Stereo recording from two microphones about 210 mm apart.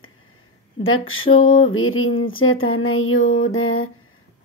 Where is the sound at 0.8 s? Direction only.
75° left (ahead or behind).